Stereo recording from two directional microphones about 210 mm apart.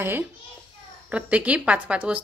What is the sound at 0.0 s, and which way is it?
A child's voice, 10° right (ahead or behind).